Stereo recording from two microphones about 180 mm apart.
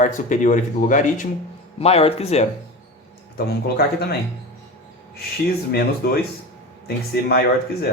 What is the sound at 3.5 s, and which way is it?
Speech, 60° left (ahead or behind).